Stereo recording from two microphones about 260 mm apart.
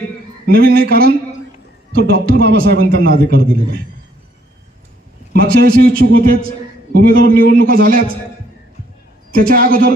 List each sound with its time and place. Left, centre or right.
0.4 s a man's voice: right
5.3 s a man's voice: right
9.3 s a man's voice: right